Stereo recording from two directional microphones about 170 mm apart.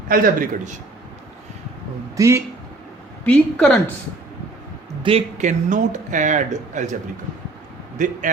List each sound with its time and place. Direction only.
0.1 s speech: 55° right (ahead or behind)
2.1 s a man's voice: 20° right (ahead or behind)
3.2 s a woman's voice: 5° left (ahead or behind)
5.0 s speech: 40° right (ahead or behind)
7.9 s speech: 50° right (ahead or behind)